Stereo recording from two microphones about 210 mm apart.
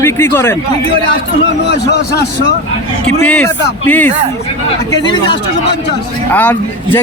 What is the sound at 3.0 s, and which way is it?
Speech, 5° left (ahead or behind).